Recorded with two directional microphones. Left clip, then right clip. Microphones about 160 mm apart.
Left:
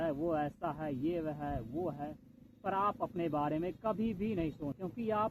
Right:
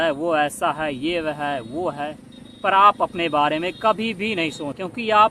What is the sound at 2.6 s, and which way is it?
Speech, 15° right (ahead or behind).